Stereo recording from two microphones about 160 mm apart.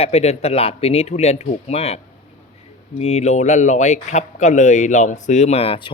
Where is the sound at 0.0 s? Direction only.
40° left (ahead or behind).